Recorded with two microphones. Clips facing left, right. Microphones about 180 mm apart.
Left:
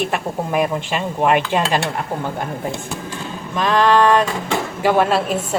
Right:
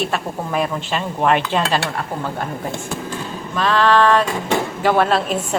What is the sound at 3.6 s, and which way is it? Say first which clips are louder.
A woman's voice: left 1 dB; 15° left (ahead or behind).